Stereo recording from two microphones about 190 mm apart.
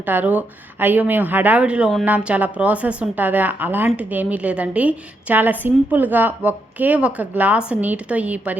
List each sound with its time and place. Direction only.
0.0 s speech: 10° right (ahead or behind)